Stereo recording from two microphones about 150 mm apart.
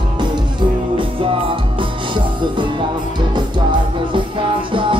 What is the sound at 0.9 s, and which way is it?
Music, 35° right (ahead or behind).